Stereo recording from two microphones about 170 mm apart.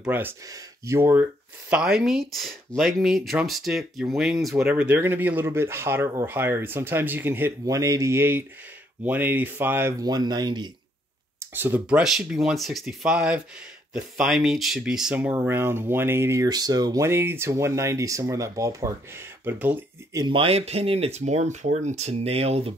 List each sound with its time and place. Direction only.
0.0 s speech: 10° right (ahead or behind)
11.3 s speech: 10° right (ahead or behind)
20.2 s speech: 30° right (ahead or behind)